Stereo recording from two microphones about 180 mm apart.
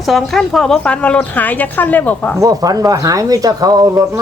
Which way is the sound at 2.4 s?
20° right (ahead or behind).